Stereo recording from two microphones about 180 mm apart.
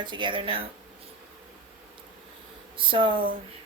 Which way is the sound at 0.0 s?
25° right (ahead or behind).